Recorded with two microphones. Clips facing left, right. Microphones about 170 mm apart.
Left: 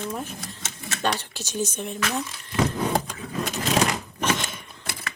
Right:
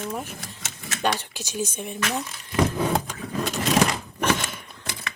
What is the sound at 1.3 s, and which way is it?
Speech, 10° right (ahead or behind).